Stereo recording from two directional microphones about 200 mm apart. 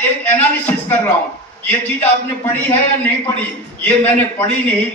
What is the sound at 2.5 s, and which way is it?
A man's voice, 10° left (ahead or behind).